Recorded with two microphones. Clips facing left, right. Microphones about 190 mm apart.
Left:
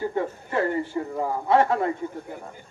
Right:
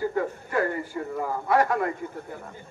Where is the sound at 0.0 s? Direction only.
25° left (ahead or behind).